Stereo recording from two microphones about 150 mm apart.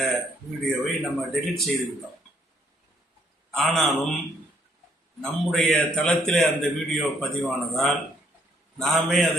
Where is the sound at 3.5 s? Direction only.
Centre (ahead or behind).